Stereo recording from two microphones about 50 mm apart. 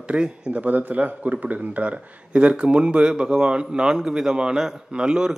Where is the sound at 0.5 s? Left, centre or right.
Right.